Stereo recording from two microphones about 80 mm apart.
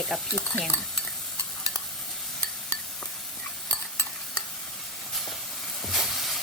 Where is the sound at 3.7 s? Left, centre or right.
Left.